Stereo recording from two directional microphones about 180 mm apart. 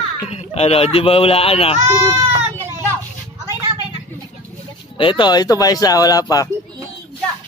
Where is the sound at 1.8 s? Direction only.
20° right (ahead or behind).